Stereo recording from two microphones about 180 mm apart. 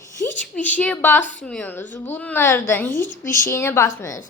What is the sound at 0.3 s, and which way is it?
A woman's voice, 10° left (ahead or behind).